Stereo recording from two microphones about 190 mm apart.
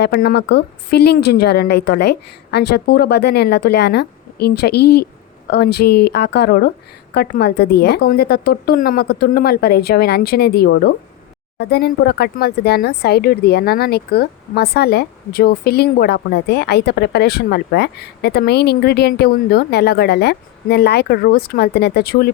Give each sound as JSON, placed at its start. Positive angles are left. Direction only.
{"t": 0.0, "sound": "speech", "side_deg": 55}